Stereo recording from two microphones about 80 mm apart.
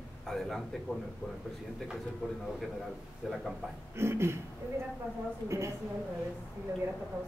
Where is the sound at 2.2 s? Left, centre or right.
Centre.